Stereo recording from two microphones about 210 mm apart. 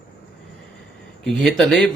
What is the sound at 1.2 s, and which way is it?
Speech, centre (ahead or behind).